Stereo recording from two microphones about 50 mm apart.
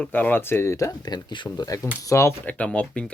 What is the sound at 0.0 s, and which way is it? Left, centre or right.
Speech, left.